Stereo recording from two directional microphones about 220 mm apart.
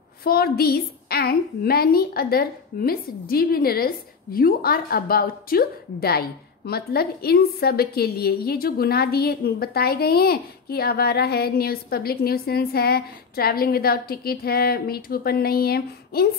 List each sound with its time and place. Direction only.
0.2 s a woman's voice: 45° left (ahead or behind)